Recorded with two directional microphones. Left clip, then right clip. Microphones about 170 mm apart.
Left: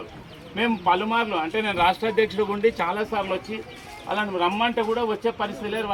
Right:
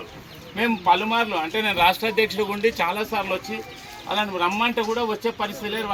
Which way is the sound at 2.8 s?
Centre (ahead or behind).